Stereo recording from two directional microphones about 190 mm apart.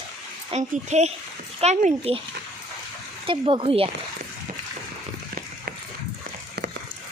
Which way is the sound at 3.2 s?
25° right (ahead or behind).